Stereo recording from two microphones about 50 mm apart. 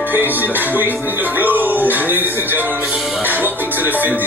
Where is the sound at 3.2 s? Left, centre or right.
Right.